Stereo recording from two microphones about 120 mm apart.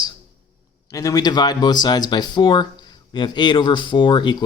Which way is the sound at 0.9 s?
30° left (ahead or behind).